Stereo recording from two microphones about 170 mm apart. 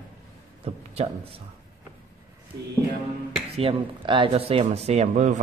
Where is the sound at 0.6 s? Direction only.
40° right (ahead or behind).